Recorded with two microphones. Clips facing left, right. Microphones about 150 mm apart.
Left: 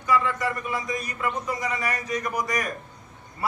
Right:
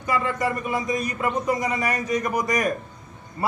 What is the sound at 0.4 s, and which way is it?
A man's voice, 20° right (ahead or behind).